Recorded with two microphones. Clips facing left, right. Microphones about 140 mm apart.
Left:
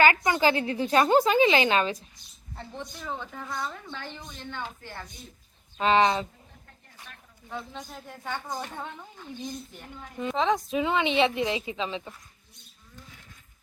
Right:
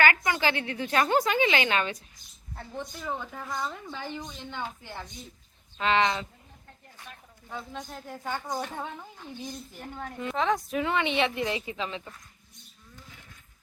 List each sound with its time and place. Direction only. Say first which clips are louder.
0.0 s speech: left 3 dB; 25° left (ahead or behind)
2.6 s a woman's voice: right 1 dB; 5° right (ahead or behind)
5.8 s speech: left 3 dB; 30° left (ahead or behind)
7.5 s a woman's voice: even; centre (ahead or behind)
10.2 s speech: left 2 dB; 20° left (ahead or behind)